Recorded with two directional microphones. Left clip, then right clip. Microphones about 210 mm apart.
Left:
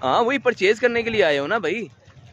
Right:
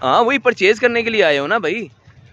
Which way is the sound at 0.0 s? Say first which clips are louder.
Right 5 dB; 25° right (ahead or behind).